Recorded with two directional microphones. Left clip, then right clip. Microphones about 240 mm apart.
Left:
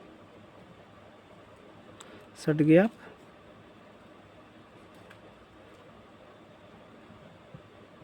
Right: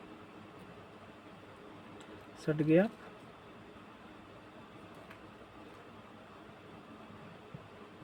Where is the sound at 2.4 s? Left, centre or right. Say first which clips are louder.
Left 7 dB; left.